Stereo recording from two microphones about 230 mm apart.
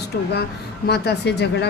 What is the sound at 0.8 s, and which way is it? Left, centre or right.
Speech, left.